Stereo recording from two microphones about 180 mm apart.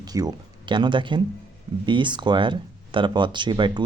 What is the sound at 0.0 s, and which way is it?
Speech, 20° right (ahead or behind).